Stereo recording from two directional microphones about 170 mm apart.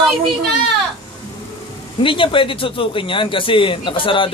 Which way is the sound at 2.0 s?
30° left (ahead or behind).